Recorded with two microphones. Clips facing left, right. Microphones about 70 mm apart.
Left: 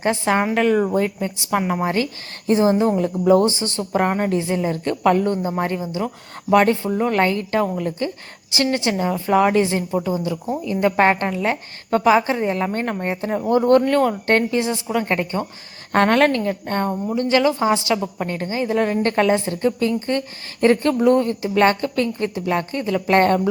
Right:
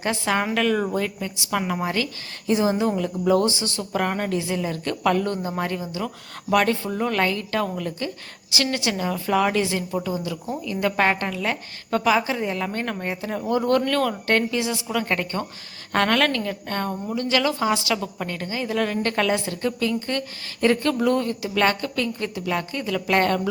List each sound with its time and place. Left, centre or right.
0.0 s a woman's voice: left
15.9 s a woman's voice: left